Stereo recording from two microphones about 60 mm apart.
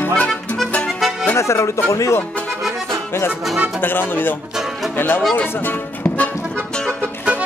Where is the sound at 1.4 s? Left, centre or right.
Left.